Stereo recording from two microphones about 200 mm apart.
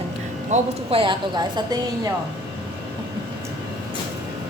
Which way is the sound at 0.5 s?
30° right (ahead or behind).